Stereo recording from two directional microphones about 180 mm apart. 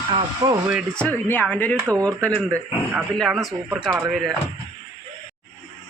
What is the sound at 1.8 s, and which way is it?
Speech, 15° right (ahead or behind).